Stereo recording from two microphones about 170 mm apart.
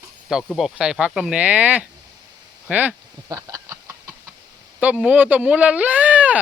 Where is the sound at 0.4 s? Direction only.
Centre (ahead or behind).